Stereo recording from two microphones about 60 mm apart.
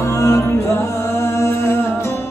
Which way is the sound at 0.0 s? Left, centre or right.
Left.